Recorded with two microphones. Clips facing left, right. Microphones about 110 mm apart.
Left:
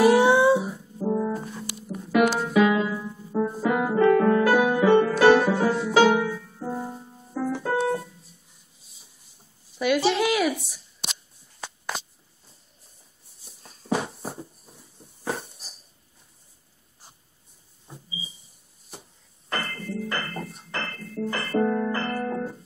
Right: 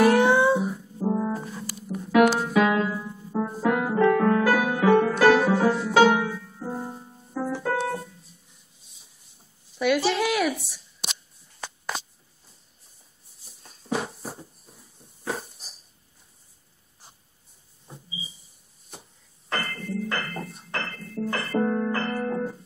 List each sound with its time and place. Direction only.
0.0 s music: 5° left (ahead or behind)
1.0 s brass instrument: 20° right (ahead or behind)
1.3 s brass instrument: centre (ahead or behind)
1.8 s music: centre (ahead or behind)
7.5 s keyboard: 5° left (ahead or behind)
9.8 s a sound: centre (ahead or behind)
13.5 s a sound: centre (ahead or behind)
19.5 s music: centre (ahead or behind)